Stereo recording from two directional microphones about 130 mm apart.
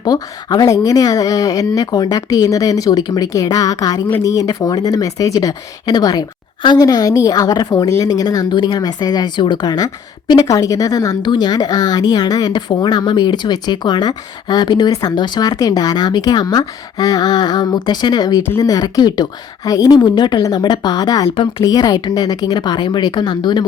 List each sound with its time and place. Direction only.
0.0 s speech: 30° left (ahead or behind)